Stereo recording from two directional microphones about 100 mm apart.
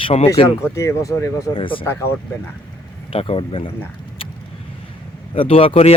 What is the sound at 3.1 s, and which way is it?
Speech, 75° left (ahead or behind).